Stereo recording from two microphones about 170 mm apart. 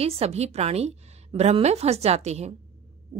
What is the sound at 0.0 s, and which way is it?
A woman's voice, 35° right (ahead or behind).